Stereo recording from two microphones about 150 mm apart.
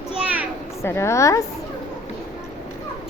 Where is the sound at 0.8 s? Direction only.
20° left (ahead or behind).